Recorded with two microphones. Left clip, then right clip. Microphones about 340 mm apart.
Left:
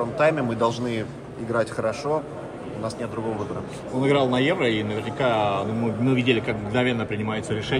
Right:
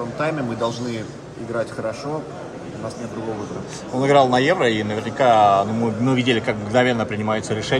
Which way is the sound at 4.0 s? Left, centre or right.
Centre.